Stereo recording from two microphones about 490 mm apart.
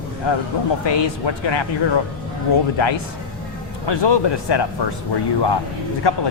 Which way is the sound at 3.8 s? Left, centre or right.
Left.